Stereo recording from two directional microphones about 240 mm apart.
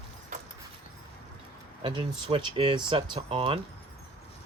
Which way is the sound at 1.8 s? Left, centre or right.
Right.